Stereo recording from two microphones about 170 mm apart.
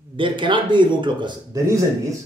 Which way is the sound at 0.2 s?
30° right (ahead or behind).